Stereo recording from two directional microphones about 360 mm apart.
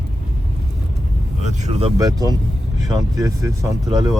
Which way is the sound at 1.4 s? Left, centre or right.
Centre.